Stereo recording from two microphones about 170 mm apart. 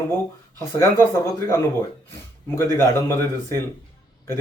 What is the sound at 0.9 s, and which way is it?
A man's voice, 15° left (ahead or behind).